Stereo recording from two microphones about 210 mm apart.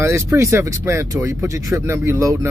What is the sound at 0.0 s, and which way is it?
Speech, 15° right (ahead or behind).